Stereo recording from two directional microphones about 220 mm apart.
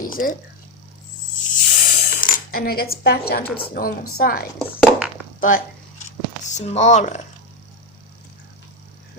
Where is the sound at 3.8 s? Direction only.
45° left (ahead or behind).